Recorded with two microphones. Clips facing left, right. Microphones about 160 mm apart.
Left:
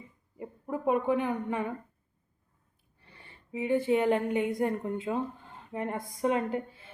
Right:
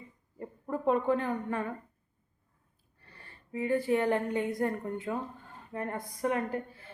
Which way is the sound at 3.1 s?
20° left (ahead or behind).